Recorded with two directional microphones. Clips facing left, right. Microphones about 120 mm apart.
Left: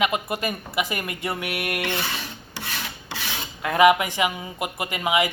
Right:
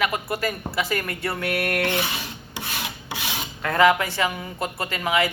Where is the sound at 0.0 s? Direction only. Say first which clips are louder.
Left 1 dB; 20° left (ahead or behind).